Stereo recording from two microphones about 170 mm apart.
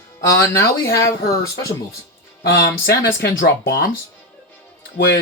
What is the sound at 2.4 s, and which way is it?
Speech, 80° left.